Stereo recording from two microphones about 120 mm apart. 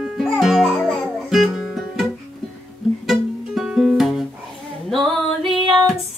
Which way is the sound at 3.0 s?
5° right (ahead or behind).